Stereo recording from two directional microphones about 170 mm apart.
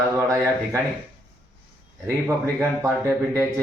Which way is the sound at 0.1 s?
15° right (ahead or behind).